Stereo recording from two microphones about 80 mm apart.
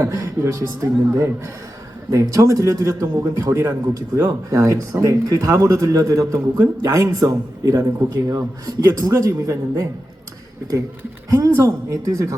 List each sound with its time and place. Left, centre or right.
0.0 s a man's voice: right
3.9 s speech: right
11.3 s a man's voice: right